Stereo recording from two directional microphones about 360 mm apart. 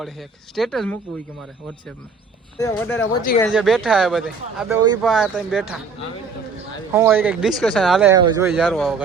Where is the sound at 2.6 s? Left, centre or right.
Centre.